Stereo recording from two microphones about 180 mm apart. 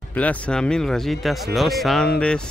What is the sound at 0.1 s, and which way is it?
Speech, 10° left (ahead or behind).